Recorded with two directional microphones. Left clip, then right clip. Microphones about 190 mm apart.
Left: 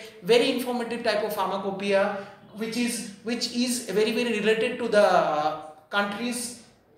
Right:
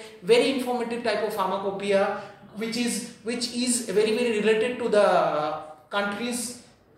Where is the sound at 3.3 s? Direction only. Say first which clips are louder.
Even; 15° left (ahead or behind).